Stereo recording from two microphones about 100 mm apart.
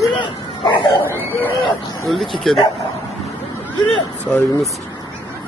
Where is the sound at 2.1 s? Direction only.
Centre (ahead or behind).